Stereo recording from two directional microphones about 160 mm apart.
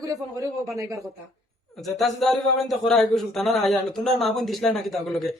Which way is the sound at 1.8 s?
Centre (ahead or behind).